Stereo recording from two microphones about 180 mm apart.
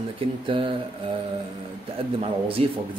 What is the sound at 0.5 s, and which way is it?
Speech, 30° right (ahead or behind).